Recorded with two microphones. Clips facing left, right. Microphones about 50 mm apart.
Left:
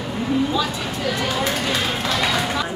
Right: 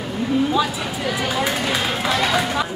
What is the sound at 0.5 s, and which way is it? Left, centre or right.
Speech, centre.